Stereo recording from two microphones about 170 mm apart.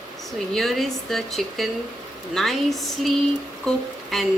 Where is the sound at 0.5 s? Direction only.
Centre (ahead or behind).